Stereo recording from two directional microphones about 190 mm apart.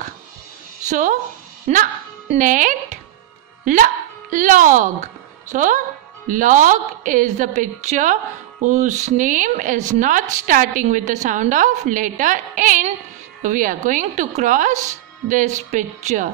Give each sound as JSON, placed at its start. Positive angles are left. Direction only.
{"t": 0.8, "sound": "a woman's voice", "side_deg": -40}